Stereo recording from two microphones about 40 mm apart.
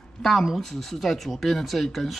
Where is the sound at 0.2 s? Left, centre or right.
Centre.